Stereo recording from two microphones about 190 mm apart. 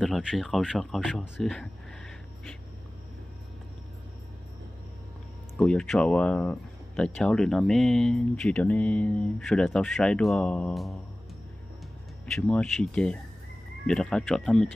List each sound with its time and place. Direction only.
0.0 s speech: centre (ahead or behind)
5.6 s speech: 5° left (ahead or behind)
12.4 s speech: 5° left (ahead or behind)